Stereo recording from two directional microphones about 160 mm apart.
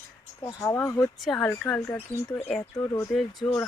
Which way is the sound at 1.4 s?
15° left (ahead or behind).